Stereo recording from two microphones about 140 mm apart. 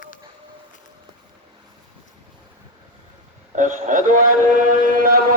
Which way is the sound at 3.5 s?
65° right (ahead or behind).